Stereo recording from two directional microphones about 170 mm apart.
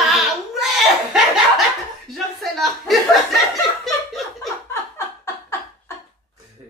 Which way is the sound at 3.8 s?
Centre (ahead or behind).